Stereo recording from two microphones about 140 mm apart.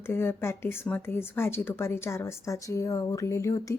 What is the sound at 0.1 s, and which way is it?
Speech, 15° left (ahead or behind).